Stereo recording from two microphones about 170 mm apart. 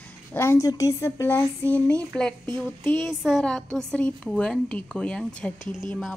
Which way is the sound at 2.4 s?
30° right (ahead or behind).